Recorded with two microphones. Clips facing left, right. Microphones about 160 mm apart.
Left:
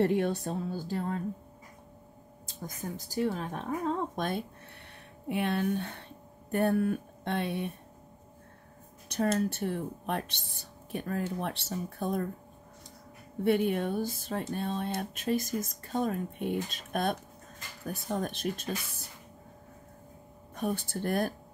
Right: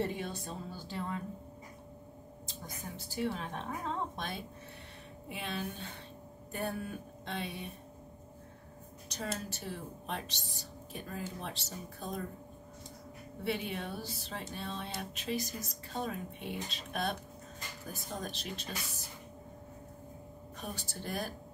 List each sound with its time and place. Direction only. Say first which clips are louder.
0.0 s speech: left 9 dB; 65° left (ahead or behind); by 1.2 s 45° left (ahead or behind)
2.4 s speech: left 7 dB; 45° left (ahead or behind)
5.3 s speech: left 11 dB; 60° left (ahead or behind)
9.1 s speech: left 11 dB; 55° left (ahead or behind)
13.4 s speech: left 10 dB; 50° left (ahead or behind)
17.8 s speech: left 9 dB; 65° left (ahead or behind)
20.5 s speech: left 11 dB; 55° left (ahead or behind)